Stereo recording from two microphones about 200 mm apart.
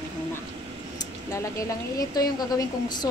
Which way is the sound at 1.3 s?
15° left (ahead or behind).